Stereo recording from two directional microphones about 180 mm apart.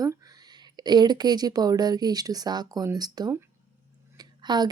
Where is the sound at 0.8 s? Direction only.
25° right (ahead or behind).